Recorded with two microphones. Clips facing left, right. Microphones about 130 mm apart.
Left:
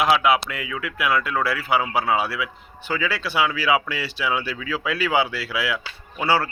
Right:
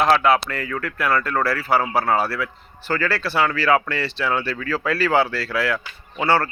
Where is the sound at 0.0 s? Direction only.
5° left (ahead or behind).